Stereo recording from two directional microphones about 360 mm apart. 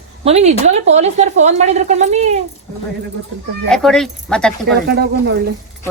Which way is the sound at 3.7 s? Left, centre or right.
Centre.